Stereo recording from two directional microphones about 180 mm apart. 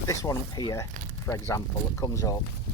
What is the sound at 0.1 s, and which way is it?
Speech, 20° left (ahead or behind).